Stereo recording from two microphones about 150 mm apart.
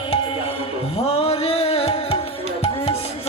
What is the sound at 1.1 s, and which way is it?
Music, 40° left (ahead or behind).